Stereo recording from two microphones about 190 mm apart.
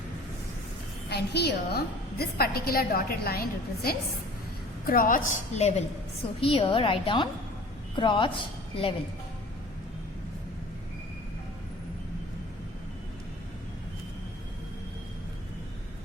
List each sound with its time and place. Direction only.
1.1 s a woman's voice: 60° left (ahead or behind); by 9.0 s 30° left (ahead or behind)